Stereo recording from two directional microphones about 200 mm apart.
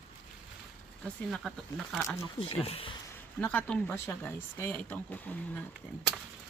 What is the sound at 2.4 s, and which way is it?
Speech, 30° left (ahead or behind).